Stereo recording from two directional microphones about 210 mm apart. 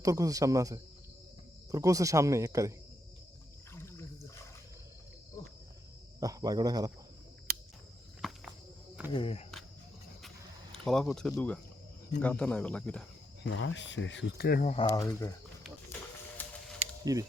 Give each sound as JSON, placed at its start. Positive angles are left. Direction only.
{"t": 0.0, "sound": "speech", "side_deg": -15}
{"t": 6.1, "sound": "speech", "side_deg": -15}
{"t": 7.5, "sound": "a sound", "side_deg": -45}
{"t": 8.2, "sound": "cricket", "side_deg": 0}
{"t": 9.1, "sound": "speech", "side_deg": 25}
{"t": 10.8, "sound": "speech", "side_deg": 0}
{"t": 13.4, "sound": "speech", "side_deg": 60}
{"t": 14.8, "sound": "speech", "side_deg": 15}
{"t": 16.4, "sound": "a sound", "side_deg": 10}
{"t": 17.1, "sound": "speech", "side_deg": -15}